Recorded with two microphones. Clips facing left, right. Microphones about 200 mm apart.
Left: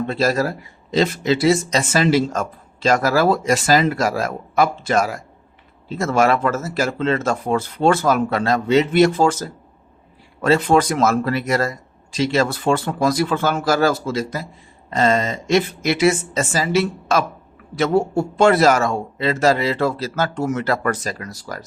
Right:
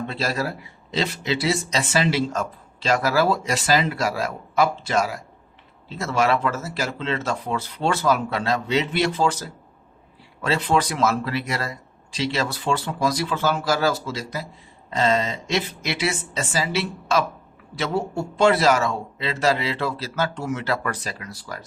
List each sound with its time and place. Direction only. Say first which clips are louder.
0.1 s speech: left 7 dB; 45° left (ahead or behind)